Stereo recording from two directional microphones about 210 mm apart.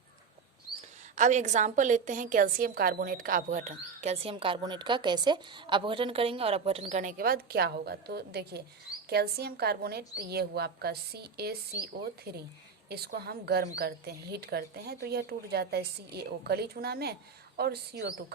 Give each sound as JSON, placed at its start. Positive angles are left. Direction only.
{"t": 1.1, "sound": "a woman's voice", "side_deg": -35}